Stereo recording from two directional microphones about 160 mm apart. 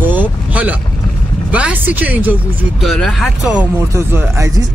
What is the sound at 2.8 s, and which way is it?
Speech, centre (ahead or behind).